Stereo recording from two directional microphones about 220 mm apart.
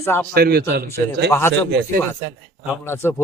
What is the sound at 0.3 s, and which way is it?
Speech, 45° right (ahead or behind).